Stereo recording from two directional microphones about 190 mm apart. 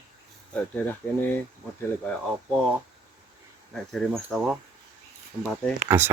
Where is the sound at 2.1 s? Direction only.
5° left (ahead or behind).